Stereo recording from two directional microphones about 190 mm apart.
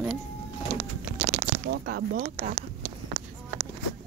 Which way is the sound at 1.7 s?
60° right (ahead or behind).